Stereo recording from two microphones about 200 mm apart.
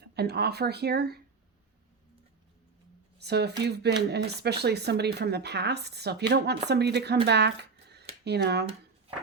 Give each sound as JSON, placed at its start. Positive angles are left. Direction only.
{"t": 0.0, "sound": "speech", "side_deg": -55}
{"t": 3.2, "sound": "speech", "side_deg": -55}